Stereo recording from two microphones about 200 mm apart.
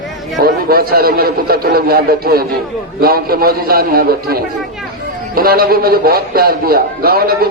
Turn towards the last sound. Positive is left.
turn(degrees=-50)  # may be behind; listen again after turning